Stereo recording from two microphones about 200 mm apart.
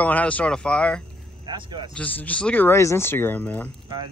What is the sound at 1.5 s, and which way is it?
Speech, 20° right (ahead or behind).